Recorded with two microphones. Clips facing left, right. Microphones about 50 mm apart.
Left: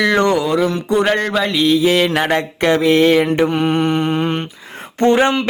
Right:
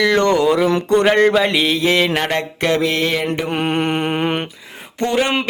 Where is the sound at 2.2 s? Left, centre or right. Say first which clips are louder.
Left 3 dB; centre.